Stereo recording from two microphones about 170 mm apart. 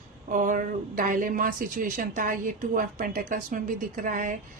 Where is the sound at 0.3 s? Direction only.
50° right (ahead or behind).